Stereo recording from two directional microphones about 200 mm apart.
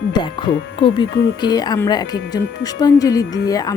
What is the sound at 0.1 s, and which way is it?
Speech, 25° left (ahead or behind).